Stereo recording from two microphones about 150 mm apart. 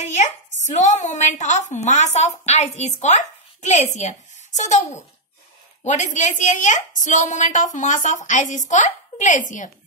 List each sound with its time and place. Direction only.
0.0 s a woman's voice: 50° left (ahead or behind)